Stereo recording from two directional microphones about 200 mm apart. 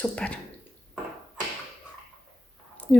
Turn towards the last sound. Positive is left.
turn(degrees=5)  # may be behind; listen again after turning